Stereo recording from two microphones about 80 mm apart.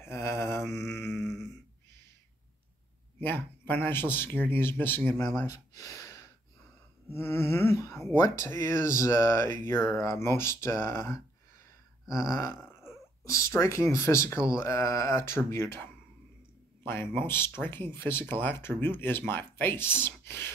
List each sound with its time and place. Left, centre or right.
0.0 s mantra: left
0.8 s mantra: centre
3.2 s speech: left
5.8 s gasp: left
7.2 s speech: left
8.1 s speech: left